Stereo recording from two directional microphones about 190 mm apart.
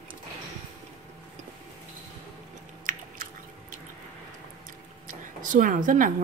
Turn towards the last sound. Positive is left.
turn(degrees=-45)  # may be behind; listen again after turning